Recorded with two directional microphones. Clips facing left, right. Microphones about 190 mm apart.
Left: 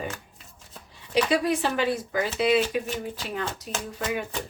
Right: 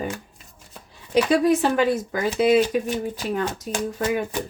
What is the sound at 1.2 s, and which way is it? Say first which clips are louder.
Speech: right 6 dB; 45° right (ahead or behind).